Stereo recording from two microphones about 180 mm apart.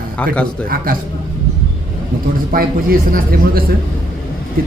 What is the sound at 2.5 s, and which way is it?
A man's voice, 55° right (ahead or behind).